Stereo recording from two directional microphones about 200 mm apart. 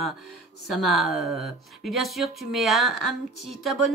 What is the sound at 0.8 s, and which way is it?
A woman's voice, centre (ahead or behind).